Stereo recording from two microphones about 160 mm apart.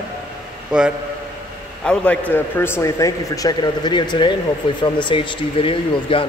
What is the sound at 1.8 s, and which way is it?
A man's voice, 5° left (ahead or behind).